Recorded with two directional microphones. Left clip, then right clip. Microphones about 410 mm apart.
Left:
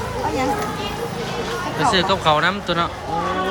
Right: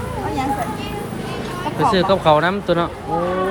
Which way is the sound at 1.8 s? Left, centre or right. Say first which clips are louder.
Right 2 dB; centre.